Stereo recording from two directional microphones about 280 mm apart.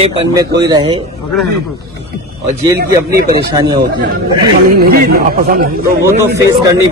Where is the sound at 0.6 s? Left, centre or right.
Centre.